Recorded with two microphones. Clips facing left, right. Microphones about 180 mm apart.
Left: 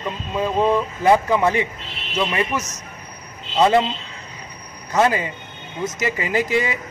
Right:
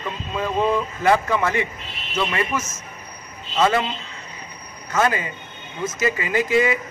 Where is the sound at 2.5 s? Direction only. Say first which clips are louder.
Left 1 dB; 35° left (ahead or behind).